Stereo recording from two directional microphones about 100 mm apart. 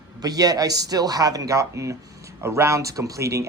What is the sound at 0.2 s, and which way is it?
Speech, 40° right (ahead or behind).